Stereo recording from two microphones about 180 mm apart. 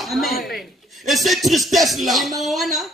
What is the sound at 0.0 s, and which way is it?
Speech, centre (ahead or behind).